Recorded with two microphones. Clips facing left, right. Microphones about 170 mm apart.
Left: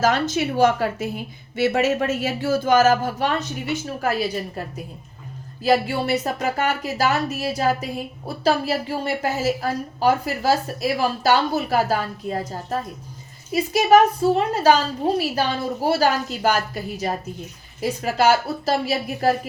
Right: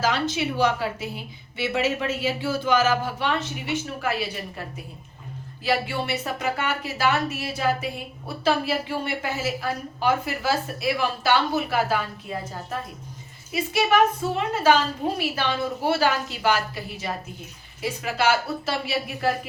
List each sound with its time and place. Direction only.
0.0 s a woman's voice: 45° left (ahead or behind)
5.6 s speech: 40° left (ahead or behind)